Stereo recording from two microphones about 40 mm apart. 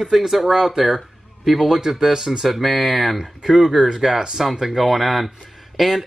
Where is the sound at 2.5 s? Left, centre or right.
Centre.